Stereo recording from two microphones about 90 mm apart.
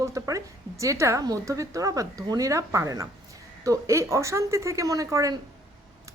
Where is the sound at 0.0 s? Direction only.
35° right (ahead or behind).